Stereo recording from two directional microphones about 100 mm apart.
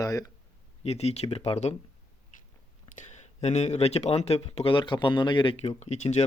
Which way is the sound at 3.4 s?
90° left.